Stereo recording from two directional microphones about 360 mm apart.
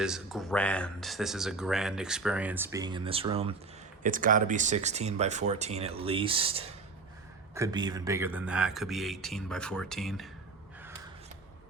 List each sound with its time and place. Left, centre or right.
0.0 s speech: centre